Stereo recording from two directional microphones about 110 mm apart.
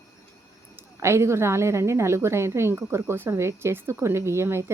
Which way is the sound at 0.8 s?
25° right (ahead or behind).